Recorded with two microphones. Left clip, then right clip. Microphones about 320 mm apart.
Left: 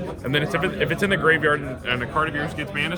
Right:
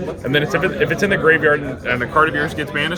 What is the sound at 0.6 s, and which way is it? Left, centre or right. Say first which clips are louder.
Speech: right 5 dB; left.